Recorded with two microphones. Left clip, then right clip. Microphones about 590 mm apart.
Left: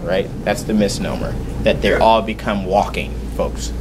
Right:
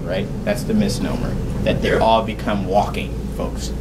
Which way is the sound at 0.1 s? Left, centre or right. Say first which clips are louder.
Left 4 dB; left.